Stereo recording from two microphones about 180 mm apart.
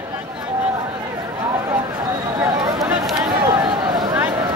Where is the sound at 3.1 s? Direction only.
25° right (ahead or behind).